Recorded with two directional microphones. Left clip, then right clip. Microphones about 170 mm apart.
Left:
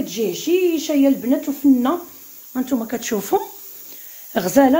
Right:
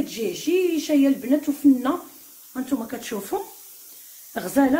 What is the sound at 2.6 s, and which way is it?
Speech, 55° left (ahead or behind).